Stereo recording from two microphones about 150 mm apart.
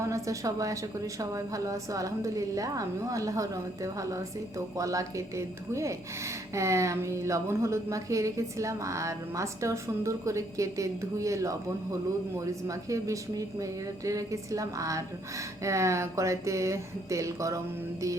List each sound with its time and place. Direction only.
0.0 s a woman's voice: 20° right (ahead or behind)